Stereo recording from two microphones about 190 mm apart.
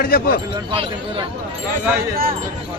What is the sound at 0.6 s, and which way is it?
Speech, 25° right (ahead or behind).